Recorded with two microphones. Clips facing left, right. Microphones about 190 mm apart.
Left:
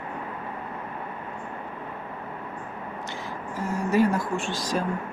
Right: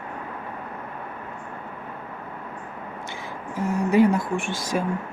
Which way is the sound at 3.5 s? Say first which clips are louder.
Right 4 dB; 15° right (ahead or behind).